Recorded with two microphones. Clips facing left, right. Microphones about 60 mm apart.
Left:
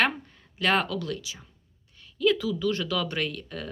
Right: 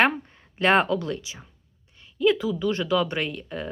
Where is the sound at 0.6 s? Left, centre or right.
Right.